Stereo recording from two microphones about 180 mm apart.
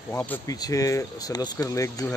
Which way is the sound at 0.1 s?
10° left (ahead or behind).